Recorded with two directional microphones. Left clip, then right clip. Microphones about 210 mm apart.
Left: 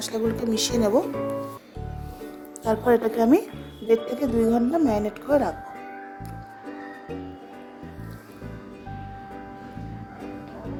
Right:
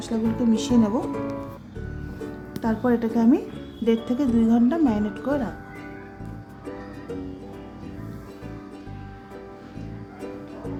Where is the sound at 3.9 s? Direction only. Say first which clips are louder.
Left 3 dB; 15° left (ahead or behind).